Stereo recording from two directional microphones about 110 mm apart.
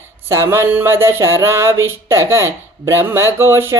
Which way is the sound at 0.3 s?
25° right (ahead or behind).